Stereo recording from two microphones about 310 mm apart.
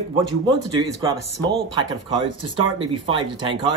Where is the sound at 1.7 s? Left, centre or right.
Centre.